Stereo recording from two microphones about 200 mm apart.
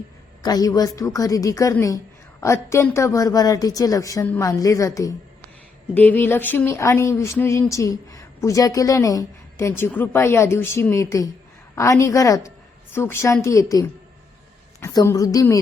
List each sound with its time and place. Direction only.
0.4 s speech: 20° left (ahead or behind)